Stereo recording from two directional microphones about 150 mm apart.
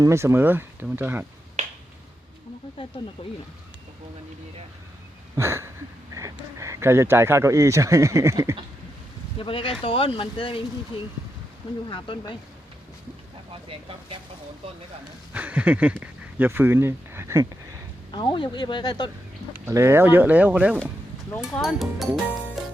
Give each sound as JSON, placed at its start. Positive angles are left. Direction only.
{"t": 0.0, "sound": "speech", "side_deg": -20}
{"t": 3.2, "sound": "speech", "side_deg": 40}
{"t": 5.4, "sound": "speech", "side_deg": -20}
{"t": 9.4, "sound": "speech", "side_deg": 35}
{"t": 11.9, "sound": "speech", "side_deg": 35}
{"t": 13.5, "sound": "speech", "side_deg": -35}
{"t": 15.3, "sound": "speech", "side_deg": -10}
{"t": 18.1, "sound": "speech", "side_deg": 30}
{"t": 19.5, "sound": "speech", "side_deg": -20}
{"t": 21.2, "sound": "speech", "side_deg": 10}
{"t": 21.6, "sound": "speech", "side_deg": 0}
{"t": 22.6, "sound": "music", "side_deg": 0}